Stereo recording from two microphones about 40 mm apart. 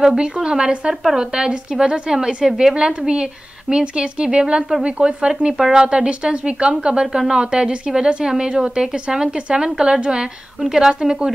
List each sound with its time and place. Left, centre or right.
0.2 s a woman's voice: right
2.7 s a woman's voice: right